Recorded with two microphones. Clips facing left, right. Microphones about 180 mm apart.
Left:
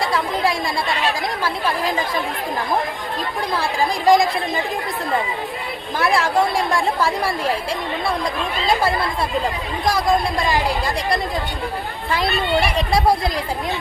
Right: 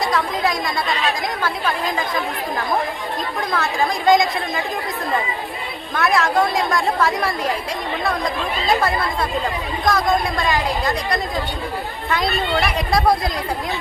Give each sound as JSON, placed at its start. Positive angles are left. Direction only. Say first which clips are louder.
{"t": 1.0, "sound": "a woman's voice", "louder": "even", "side_deg": 30}
{"t": 3.5, "sound": "a woman's voice", "louder": "even", "side_deg": 30}
{"t": 6.0, "sound": "a woman's voice", "louder": "even", "side_deg": 30}
{"t": 8.6, "sound": "a woman's voice", "louder": "even", "side_deg": 30}